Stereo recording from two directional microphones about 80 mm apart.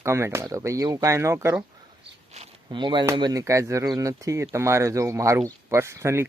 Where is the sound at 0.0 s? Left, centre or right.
Right.